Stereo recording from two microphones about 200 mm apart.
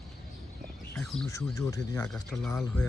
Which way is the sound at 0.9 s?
5° left (ahead or behind).